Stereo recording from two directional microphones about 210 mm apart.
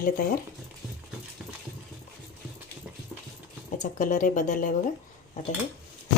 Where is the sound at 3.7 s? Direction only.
35° left (ahead or behind).